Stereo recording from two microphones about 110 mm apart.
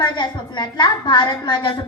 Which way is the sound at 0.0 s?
40° left (ahead or behind).